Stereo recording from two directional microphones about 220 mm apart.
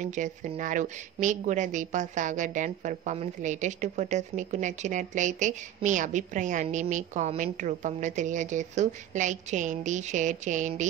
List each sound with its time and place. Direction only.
0.0 s a woman's voice: 35° right (ahead or behind)